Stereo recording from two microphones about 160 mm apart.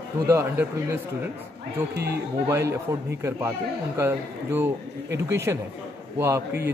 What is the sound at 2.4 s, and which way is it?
A man's voice, 15° right (ahead or behind).